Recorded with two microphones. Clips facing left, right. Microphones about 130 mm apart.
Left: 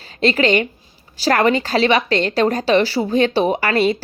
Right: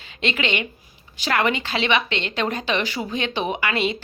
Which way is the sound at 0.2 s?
40° left (ahead or behind).